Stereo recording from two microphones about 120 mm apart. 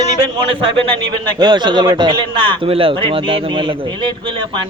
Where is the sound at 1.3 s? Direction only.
35° right (ahead or behind).